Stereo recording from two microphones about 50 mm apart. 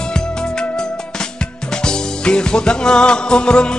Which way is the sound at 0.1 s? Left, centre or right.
Centre.